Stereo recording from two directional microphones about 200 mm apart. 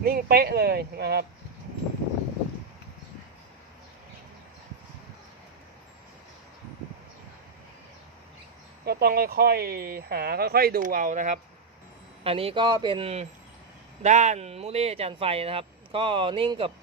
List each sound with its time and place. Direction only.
0.0 s speech: 50° right (ahead or behind)
8.8 s speech: 55° right (ahead or behind)
12.2 s speech: 30° right (ahead or behind)